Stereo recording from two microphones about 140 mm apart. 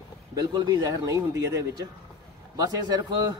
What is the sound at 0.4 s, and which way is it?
A man's voice, 30° right (ahead or behind).